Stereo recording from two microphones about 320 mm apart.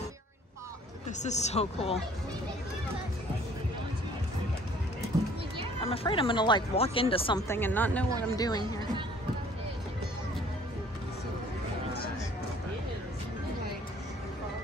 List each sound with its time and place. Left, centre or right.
1.2 s speech: left
5.8 s speech: centre